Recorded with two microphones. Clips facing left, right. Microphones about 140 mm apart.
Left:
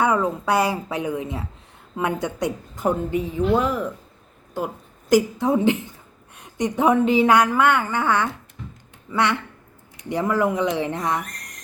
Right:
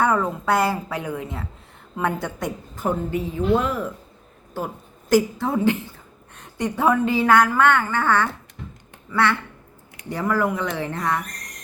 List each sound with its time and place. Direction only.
0.0 s a woman's voice: 15° left (ahead or behind)
5.0 s a woman's voice: 15° left (ahead or behind)